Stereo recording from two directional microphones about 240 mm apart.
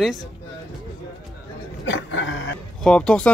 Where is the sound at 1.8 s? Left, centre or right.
Left.